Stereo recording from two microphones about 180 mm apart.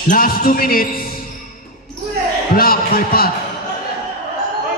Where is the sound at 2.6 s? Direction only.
55° left (ahead or behind).